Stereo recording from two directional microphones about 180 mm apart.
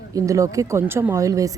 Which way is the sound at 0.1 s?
15° right (ahead or behind).